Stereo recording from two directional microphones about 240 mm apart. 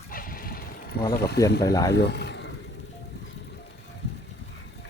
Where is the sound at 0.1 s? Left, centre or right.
Left.